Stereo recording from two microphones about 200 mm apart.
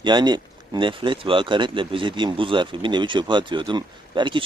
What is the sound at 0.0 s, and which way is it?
Speech, 20° right (ahead or behind).